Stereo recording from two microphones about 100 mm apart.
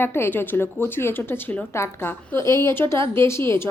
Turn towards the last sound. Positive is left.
turn(degrees=25)  # may be behind; listen again after turning